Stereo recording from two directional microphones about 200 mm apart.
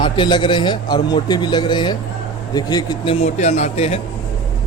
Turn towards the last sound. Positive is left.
turn(degrees=30)  # may be behind; listen again after turning